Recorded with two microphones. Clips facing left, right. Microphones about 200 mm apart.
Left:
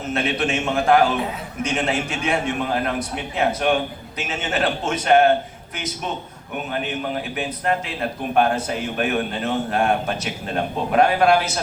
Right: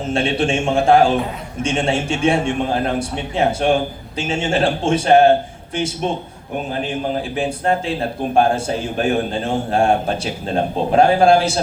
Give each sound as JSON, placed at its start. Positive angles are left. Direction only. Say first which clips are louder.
{"t": 0.0, "sound": "a man's voice", "louder": "right 4 dB", "side_deg": -30}